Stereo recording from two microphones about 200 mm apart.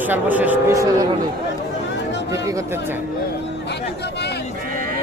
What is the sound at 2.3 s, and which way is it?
Speech, 15° right (ahead or behind).